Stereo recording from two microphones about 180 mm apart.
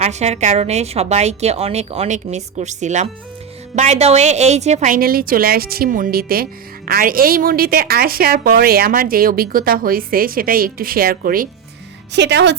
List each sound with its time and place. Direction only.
0.0 s a woman's voice: 40° right (ahead or behind)
12.1 s speech: 70° right (ahead or behind)